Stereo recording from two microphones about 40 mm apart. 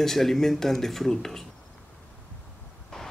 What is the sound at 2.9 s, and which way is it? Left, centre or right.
Vehicle, centre.